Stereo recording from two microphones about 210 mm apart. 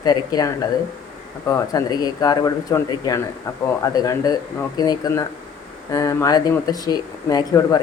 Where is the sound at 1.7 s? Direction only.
20° left (ahead or behind).